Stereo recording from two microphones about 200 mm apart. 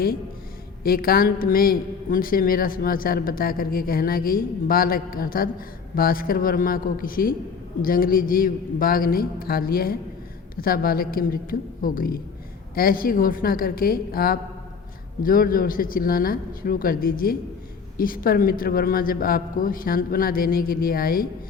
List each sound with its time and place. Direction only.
0.9 s a woman's voice: 50° left (ahead or behind)